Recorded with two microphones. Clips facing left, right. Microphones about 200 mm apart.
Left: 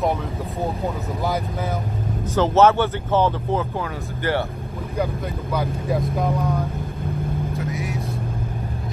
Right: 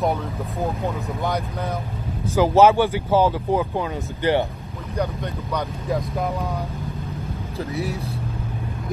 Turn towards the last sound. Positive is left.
turn(degrees=-35)  # may be behind; listen again after turning